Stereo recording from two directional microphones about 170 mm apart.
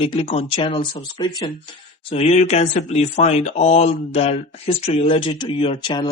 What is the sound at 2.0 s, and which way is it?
Speech, 40° left (ahead or behind).